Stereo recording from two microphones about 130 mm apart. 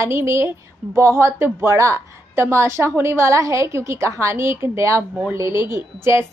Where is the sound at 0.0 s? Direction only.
20° right (ahead or behind).